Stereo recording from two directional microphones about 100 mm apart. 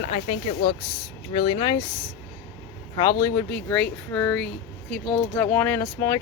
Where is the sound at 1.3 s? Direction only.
55° left (ahead or behind).